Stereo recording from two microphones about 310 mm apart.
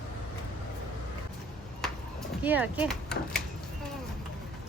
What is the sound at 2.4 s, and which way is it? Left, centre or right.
Speech, centre.